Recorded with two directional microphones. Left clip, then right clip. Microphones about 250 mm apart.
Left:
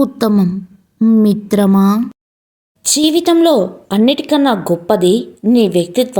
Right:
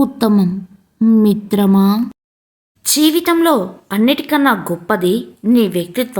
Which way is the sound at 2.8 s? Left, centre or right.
Centre.